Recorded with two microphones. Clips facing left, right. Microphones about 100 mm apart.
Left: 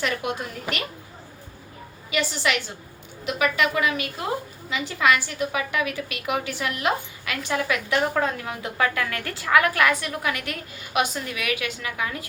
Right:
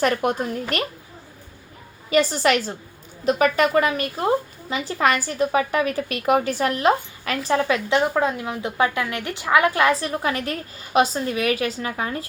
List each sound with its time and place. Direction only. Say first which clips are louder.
0.0 s a woman's voice: right 6 dB; 45° right (ahead or behind)
2.0 s a woman's voice: right 7 dB; 40° right (ahead or behind)